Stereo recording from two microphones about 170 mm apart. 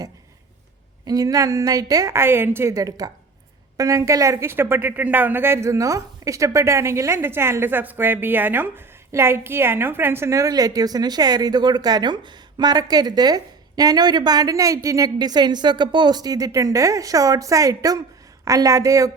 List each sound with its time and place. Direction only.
1.0 s speech: 20° right (ahead or behind)